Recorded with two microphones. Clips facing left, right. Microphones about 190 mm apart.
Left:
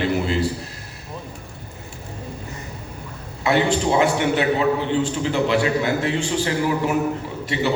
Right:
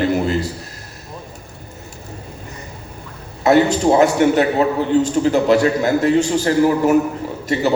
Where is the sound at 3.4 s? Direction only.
45° right (ahead or behind).